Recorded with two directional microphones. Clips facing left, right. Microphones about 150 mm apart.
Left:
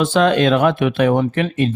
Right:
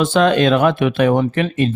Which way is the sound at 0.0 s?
45° right (ahead or behind).